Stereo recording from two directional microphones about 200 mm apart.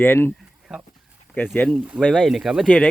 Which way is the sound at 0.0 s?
10° left (ahead or behind).